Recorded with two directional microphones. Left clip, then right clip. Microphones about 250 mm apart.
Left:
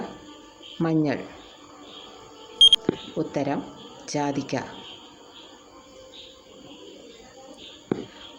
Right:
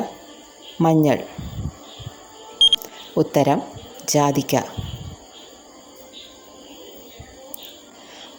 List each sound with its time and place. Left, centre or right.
0.8 s speech: right
2.6 s a sound: centre
3.2 s speech: right